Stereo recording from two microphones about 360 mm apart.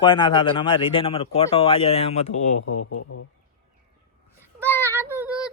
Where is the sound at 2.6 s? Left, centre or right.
Left.